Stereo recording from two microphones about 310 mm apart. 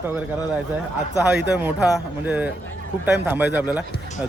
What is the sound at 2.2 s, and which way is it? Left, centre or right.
Speech, centre.